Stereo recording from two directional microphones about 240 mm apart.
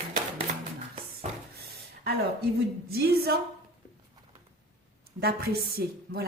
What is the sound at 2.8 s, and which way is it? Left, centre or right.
Speech, right.